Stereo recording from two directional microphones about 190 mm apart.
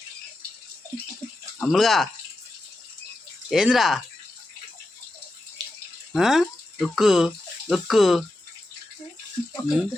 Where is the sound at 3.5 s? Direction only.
5° right (ahead or behind).